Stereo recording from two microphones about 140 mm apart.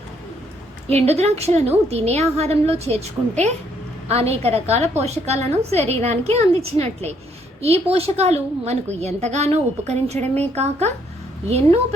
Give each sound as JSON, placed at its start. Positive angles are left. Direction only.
{"t": 0.9, "sound": "a woman's voice", "side_deg": -50}